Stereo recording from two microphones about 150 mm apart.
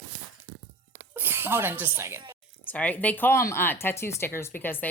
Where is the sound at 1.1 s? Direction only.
15° right (ahead or behind).